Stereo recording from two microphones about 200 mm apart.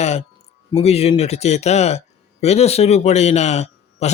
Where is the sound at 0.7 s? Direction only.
30° left (ahead or behind).